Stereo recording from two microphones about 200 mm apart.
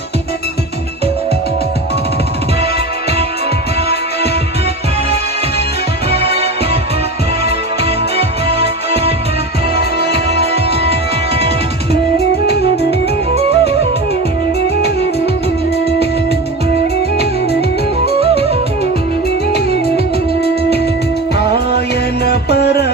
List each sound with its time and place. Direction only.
6.1 s music: 55° left (ahead or behind)
9.7 s music: 55° left (ahead or behind)
12.1 s music: 55° left (ahead or behind)
13.3 s music: 30° right (ahead or behind)
18.2 s music: 30° right (ahead or behind)
20.4 s music: 55° left (ahead or behind)
22.2 s music: 55° left (ahead or behind)